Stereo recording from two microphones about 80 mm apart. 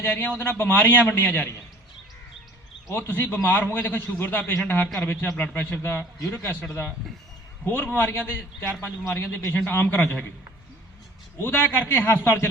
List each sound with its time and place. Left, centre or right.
0.0 s a man's voice: left
3.1 s a man's voice: left
11.4 s a man's voice: left